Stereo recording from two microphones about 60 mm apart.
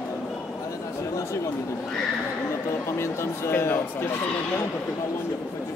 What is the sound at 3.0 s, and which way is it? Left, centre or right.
Speech, left.